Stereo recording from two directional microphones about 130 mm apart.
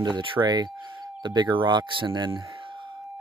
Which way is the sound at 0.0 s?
40° right (ahead or behind).